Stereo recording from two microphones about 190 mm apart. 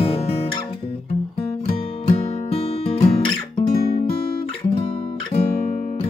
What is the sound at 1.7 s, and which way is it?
Music, 30° left (ahead or behind).